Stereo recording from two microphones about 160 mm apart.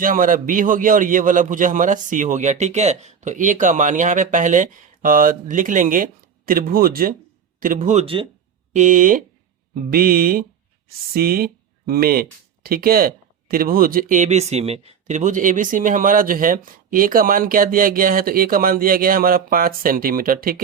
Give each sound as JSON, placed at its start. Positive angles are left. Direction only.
{"t": 0.0, "sound": "speech", "side_deg": -60}
{"t": 8.0, "sound": "speech", "side_deg": -35}
{"t": 8.7, "sound": "speech", "side_deg": -50}